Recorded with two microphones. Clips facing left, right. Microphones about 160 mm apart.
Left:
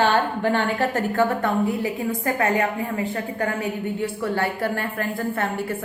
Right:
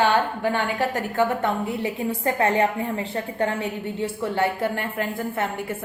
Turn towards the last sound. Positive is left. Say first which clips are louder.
# left 2 dB
turn(degrees=-20)  # may be behind; listen again after turning